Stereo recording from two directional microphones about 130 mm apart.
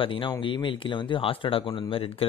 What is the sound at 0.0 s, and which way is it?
Speech, 40° left (ahead or behind).